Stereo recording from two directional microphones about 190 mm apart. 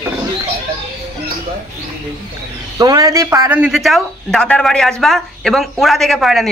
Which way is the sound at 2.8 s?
20° right (ahead or behind).